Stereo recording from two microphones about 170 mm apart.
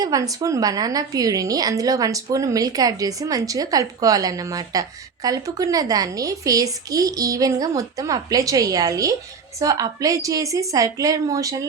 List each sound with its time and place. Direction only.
0.0 s a woman's voice: 20° right (ahead or behind)